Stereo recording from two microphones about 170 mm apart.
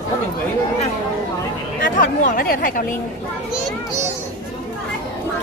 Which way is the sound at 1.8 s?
55° left (ahead or behind).